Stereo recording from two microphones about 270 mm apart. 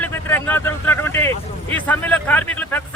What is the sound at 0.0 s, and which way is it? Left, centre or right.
Speech, centre.